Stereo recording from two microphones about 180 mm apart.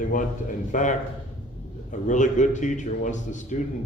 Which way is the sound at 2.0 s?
45° left (ahead or behind).